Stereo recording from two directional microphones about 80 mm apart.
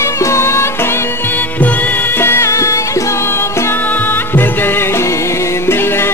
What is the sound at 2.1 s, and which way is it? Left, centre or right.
Music, left.